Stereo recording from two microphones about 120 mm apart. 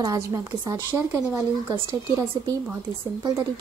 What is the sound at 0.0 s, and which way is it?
A woman's voice, 30° right (ahead or behind).